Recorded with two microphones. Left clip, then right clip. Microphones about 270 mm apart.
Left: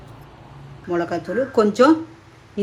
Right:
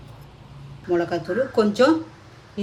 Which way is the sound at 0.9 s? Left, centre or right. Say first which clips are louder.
Even; left.